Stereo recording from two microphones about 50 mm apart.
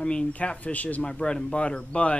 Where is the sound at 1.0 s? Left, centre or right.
Centre.